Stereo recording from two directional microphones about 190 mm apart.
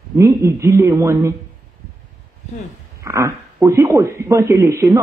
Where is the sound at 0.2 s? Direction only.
15° right (ahead or behind).